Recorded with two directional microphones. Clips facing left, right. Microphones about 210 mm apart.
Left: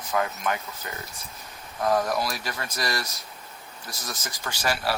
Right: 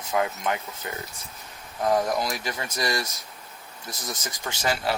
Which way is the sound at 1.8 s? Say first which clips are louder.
Right 1 dB; 20° right (ahead or behind).